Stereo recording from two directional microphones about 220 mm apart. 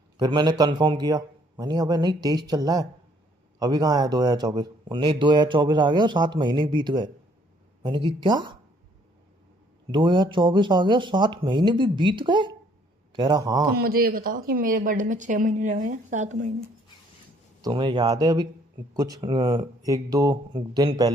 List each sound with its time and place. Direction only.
0.2 s speech: 20° right (ahead or behind)
9.8 s speech: 20° right (ahead or behind)
13.7 s a woman's voice: 45° right (ahead or behind)
17.6 s speech: 20° right (ahead or behind)